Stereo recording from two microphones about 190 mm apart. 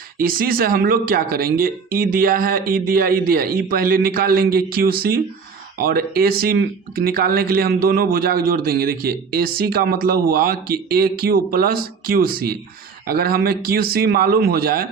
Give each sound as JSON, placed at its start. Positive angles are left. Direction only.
{"t": 0.2, "sound": "speech", "side_deg": -50}